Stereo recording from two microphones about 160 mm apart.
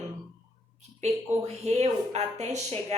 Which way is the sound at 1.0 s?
45° right (ahead or behind).